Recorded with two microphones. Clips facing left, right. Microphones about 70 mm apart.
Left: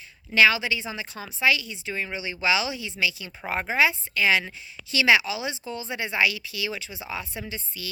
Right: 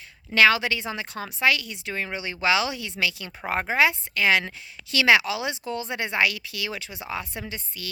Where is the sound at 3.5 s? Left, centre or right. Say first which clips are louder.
Right 1 dB; right.